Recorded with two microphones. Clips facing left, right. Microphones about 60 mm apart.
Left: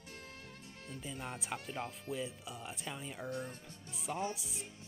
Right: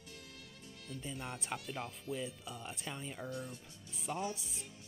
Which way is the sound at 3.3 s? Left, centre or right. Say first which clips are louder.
Left 4 dB; left.